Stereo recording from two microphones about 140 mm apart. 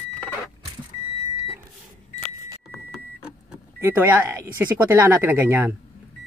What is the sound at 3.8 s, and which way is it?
Speech, 15° right (ahead or behind).